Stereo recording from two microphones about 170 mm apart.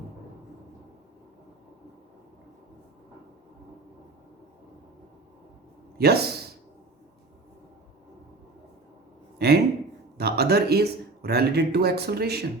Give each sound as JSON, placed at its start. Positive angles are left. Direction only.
{"t": 6.0, "sound": "speech", "side_deg": -70}
{"t": 9.4, "sound": "a sound", "side_deg": -70}
{"t": 10.2, "sound": "speech", "side_deg": -70}